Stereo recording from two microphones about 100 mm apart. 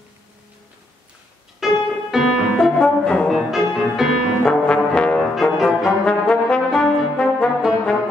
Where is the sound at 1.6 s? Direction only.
5° right (ahead or behind).